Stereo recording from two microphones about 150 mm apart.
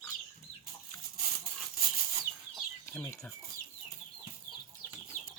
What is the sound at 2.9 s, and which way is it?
Speech, 15° left (ahead or behind).